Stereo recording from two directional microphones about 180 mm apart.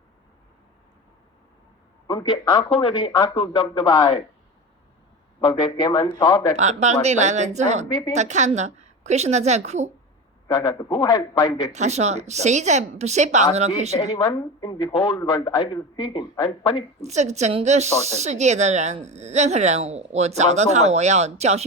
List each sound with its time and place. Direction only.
2.0 s speech: 25° left (ahead or behind)
5.4 s speech: 25° left (ahead or behind)
6.6 s speech: 40° right (ahead or behind)
10.5 s speech: 25° left (ahead or behind)
11.7 s speech: 40° right (ahead or behind)
14.1 s speech: 25° left (ahead or behind)
17.0 s speech: 40° right (ahead or behind)